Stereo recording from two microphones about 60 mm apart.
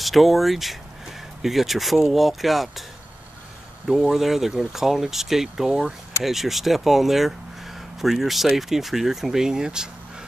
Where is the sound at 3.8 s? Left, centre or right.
Centre.